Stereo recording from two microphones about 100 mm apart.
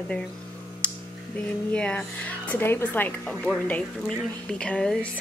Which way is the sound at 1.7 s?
10° left (ahead or behind).